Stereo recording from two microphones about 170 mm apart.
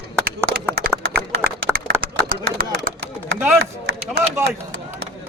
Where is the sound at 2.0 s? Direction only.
55° right (ahead or behind).